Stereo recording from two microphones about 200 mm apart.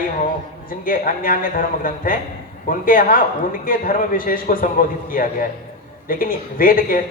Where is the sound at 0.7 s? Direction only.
45° left (ahead or behind).